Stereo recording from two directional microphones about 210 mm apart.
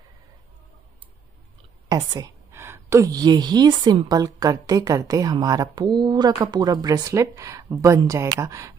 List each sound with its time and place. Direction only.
1.9 s a woman's voice: 20° right (ahead or behind)